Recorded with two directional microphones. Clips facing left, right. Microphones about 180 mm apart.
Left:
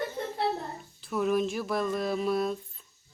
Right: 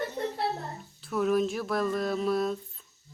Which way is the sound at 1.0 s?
Centre (ahead or behind).